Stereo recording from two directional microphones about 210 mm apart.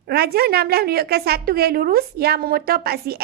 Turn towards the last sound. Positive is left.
turn(degrees=-50)  # may be behind; listen again after turning